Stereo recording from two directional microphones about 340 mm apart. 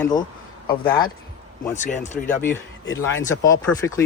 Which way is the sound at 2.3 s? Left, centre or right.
Centre.